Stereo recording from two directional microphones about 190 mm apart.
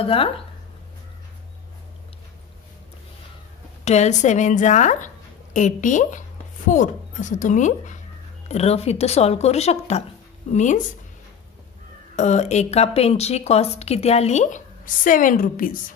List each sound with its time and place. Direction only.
0.0 s speech: 30° left (ahead or behind)
3.8 s a woman's voice: 35° left (ahead or behind)
12.2 s a woman's voice: 35° left (ahead or behind)